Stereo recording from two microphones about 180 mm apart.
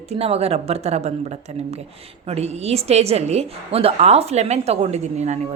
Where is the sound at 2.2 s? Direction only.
35° right (ahead or behind).